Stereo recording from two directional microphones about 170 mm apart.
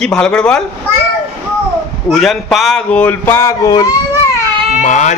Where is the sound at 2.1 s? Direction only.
Centre (ahead or behind); by 3.8 s 20° left (ahead or behind).